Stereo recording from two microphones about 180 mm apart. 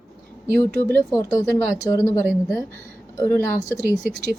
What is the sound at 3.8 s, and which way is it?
Speech, 65° right (ahead or behind).